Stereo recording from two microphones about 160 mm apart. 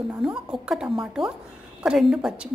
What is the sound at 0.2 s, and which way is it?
Speech, 5° right (ahead or behind).